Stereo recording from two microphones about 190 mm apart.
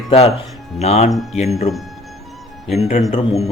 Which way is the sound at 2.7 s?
35° left (ahead or behind).